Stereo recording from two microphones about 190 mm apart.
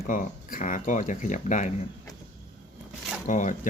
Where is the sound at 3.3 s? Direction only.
40° left (ahead or behind).